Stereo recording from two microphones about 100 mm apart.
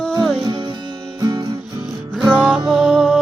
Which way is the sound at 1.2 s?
40° right (ahead or behind).